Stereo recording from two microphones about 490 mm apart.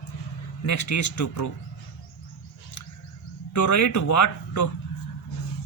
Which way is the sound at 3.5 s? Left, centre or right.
Left.